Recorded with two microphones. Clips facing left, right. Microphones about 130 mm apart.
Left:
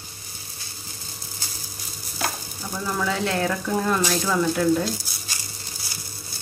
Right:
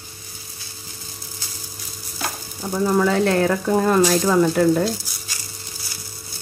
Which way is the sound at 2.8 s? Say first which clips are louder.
Right 8 dB; 45° right (ahead or behind).